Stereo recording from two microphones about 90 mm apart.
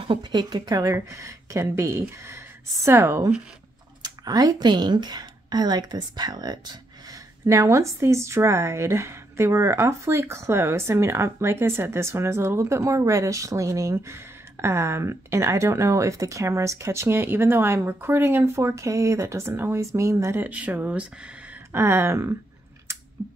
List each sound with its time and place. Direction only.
0.1 s a woman's voice: 55° right (ahead or behind); by 3.2 s 25° right (ahead or behind)
4.0 s speech: 45° right (ahead or behind)
7.4 s speech: 35° right (ahead or behind)
20.3 s speech: 15° right (ahead or behind)
21.7 s a sound: 30° right (ahead or behind)
23.2 s typing: 25° right (ahead or behind)